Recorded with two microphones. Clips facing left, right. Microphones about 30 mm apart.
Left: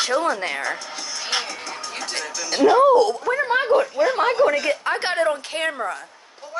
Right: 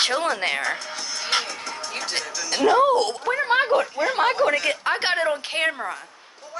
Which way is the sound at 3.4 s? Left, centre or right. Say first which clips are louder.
Left 1 dB; right.